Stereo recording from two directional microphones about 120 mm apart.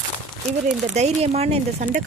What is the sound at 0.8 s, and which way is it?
Speech, 70° right (ahead or behind).